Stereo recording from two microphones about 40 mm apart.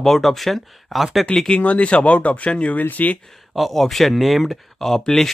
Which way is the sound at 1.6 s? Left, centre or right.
Left.